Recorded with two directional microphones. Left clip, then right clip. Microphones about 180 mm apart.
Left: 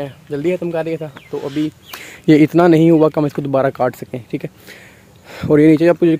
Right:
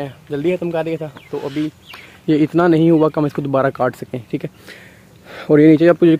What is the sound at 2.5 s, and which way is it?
Speech, 20° left (ahead or behind).